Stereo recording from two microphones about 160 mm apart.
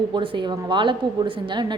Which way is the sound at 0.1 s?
30° right (ahead or behind).